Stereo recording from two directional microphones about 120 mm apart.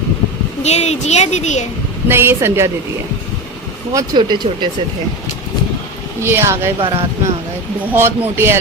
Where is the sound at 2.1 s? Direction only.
20° right (ahead or behind).